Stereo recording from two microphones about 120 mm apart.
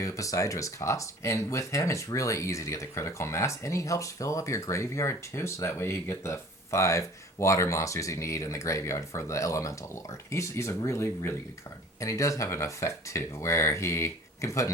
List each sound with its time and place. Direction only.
0.0 s speech: 25° left (ahead or behind)